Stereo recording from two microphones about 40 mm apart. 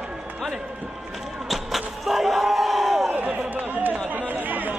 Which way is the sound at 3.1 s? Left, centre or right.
Right.